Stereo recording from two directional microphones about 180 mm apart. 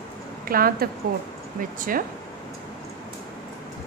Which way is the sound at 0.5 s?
55° right (ahead or behind).